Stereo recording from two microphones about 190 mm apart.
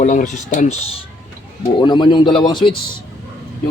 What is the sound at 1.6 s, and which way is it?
Speech, 25° left (ahead or behind).